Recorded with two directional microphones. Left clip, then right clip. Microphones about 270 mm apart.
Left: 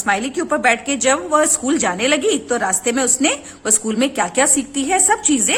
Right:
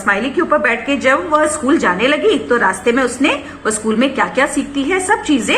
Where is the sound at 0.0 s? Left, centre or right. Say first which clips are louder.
Right 4 dB; left.